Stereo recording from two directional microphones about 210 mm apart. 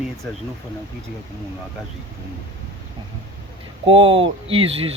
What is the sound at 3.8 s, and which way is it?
Speech, 25° right (ahead or behind).